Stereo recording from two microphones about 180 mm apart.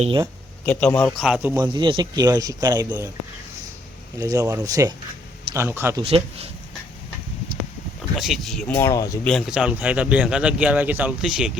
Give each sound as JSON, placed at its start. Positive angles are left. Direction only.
{"t": 0.0, "sound": "speech", "side_deg": -30}
{"t": 0.6, "sound": "speech", "side_deg": 5}
{"t": 1.2, "sound": "speech", "side_deg": -5}
{"t": 4.2, "sound": "speech", "side_deg": -20}
{"t": 6.0, "sound": "speech", "side_deg": -30}
{"t": 8.2, "sound": "speech", "side_deg": 0}
{"t": 9.2, "sound": "a man's voice", "side_deg": 0}